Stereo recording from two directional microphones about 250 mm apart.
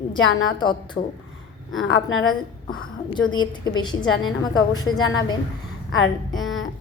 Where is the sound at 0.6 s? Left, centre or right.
Centre.